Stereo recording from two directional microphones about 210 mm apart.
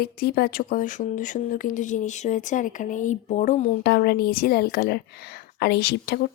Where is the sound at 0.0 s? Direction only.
50° left (ahead or behind).